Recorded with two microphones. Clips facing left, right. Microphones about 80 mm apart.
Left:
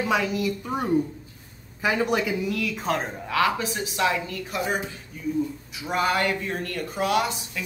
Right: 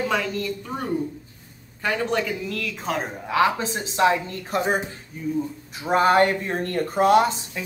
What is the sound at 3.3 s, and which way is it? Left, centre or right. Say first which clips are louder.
Speech: right 3 dB; right.